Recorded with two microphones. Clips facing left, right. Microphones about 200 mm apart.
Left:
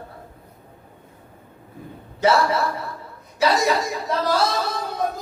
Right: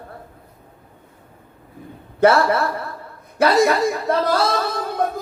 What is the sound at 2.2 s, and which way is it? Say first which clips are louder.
Speech: right 4 dB; 55° right (ahead or behind).